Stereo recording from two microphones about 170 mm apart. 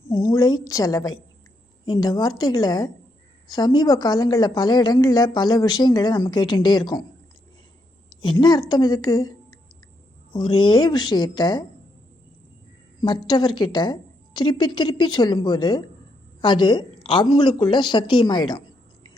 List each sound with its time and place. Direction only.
0.3 s a woman's voice: 25° left (ahead or behind)
8.2 s a woman's voice: 25° left (ahead or behind)
13.0 s a woman's voice: 25° left (ahead or behind)